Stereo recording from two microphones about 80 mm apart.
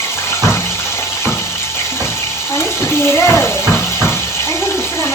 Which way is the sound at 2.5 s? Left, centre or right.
Left.